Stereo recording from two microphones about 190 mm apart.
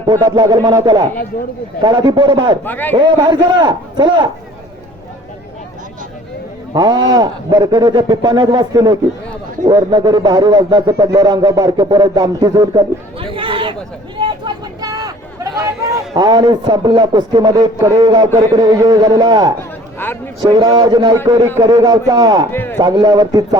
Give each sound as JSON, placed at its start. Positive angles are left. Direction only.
{"t": 0.0, "sound": "a man's voice", "side_deg": -20}
{"t": 2.6, "sound": "a man's voice", "side_deg": 10}
{"t": 2.9, "sound": "a man's voice", "side_deg": -25}
{"t": 6.7, "sound": "a man's voice", "side_deg": -20}
{"t": 14.2, "sound": "vehicle", "side_deg": -25}
{"t": 15.6, "sound": "a man's voice", "side_deg": -15}
{"t": 20.0, "sound": "a man's voice", "side_deg": 10}
{"t": 20.4, "sound": "a man's voice", "side_deg": -20}
{"t": 22.5, "sound": "a man's voice", "side_deg": 10}
{"t": 22.8, "sound": "a man's voice", "side_deg": -20}